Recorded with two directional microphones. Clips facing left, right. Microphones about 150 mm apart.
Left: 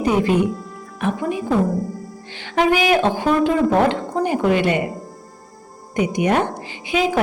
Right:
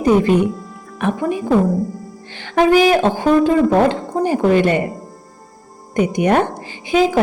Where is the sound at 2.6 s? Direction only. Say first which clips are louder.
Right 4 dB; 40° right (ahead or behind).